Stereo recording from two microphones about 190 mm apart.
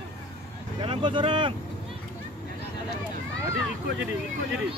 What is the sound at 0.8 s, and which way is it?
Speech, 25° right (ahead or behind).